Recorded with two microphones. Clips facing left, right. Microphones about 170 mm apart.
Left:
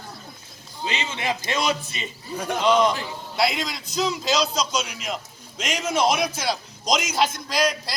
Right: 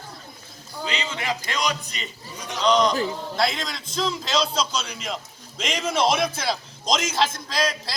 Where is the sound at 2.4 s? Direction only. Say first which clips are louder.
Left 5 dB; 55° left (ahead or behind).